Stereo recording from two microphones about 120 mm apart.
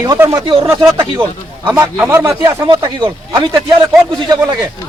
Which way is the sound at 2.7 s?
45° right (ahead or behind).